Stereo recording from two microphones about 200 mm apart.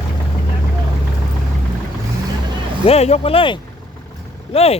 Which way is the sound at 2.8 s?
30° left (ahead or behind).